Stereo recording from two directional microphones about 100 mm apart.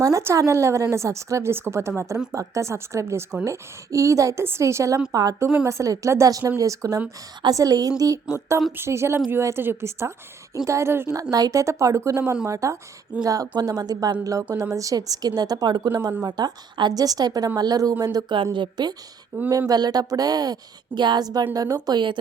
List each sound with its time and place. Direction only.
0.0 s speech: 30° right (ahead or behind)
11.2 s a woman's voice: 40° right (ahead or behind)
19.5 s speech: 35° right (ahead or behind)
21.8 s a woman's voice: 50° right (ahead or behind)